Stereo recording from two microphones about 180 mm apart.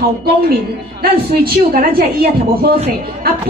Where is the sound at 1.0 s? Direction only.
55° right (ahead or behind).